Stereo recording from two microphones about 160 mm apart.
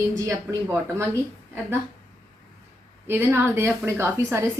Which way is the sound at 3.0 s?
15° right (ahead or behind).